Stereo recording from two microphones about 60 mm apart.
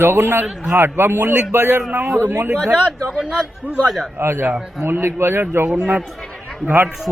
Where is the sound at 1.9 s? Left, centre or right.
Right.